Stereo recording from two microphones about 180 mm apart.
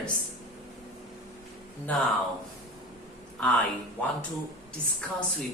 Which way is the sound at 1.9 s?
10° left (ahead or behind).